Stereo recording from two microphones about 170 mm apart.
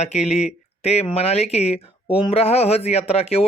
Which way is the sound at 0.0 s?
40° left (ahead or behind).